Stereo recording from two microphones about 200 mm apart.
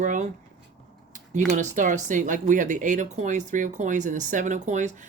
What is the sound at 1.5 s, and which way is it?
Speech, 40° right (ahead or behind).